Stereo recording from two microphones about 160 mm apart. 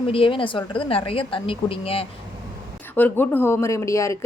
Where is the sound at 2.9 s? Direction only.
10° left (ahead or behind).